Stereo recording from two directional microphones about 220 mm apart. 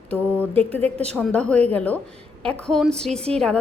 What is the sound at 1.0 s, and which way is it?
A woman's voice, 5° left (ahead or behind).